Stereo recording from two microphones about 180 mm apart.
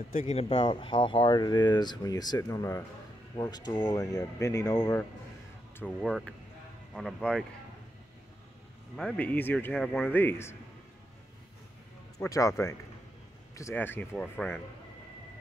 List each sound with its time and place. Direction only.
0.1 s speech: 40° left (ahead or behind); by 5.0 s 15° left (ahead or behind)
5.8 s speech: 5° left (ahead or behind)
8.9 s speech: 5° left (ahead or behind)
12.2 s speech: 15° left (ahead or behind)